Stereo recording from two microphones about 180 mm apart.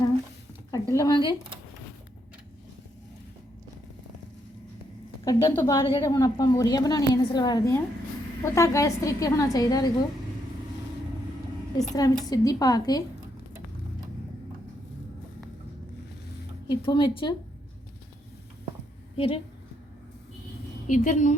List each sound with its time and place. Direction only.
0.7 s speech: 20° left (ahead or behind)
5.2 s a woman's voice: 20° left (ahead or behind)
11.9 s a woman's voice: 20° left (ahead or behind)
16.6 s a woman's voice: 25° left (ahead or behind)
19.1 s a woman's voice: 30° left (ahead or behind)
20.8 s a woman's voice: 45° left (ahead or behind)